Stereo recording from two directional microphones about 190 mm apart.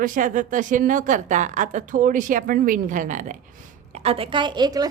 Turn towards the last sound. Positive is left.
turn(degrees=-20)  # may be behind; listen again after turning